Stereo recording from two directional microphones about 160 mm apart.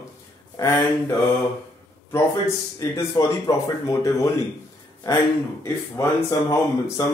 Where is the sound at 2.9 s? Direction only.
20° left (ahead or behind).